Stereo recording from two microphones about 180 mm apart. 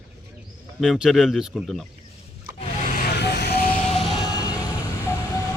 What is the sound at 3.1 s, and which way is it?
Music, 65° left (ahead or behind).